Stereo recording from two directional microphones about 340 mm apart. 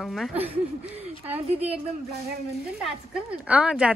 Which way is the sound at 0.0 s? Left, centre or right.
Centre.